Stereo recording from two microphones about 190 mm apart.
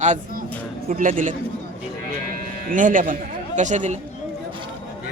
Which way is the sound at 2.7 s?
45° right (ahead or behind).